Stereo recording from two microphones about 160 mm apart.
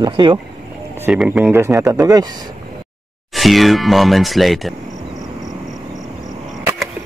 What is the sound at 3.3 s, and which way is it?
Speech, centre (ahead or behind).